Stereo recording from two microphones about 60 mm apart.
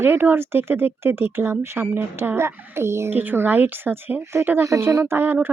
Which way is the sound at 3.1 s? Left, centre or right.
Right.